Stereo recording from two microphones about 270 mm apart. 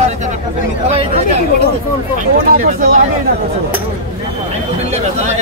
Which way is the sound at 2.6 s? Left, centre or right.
Right.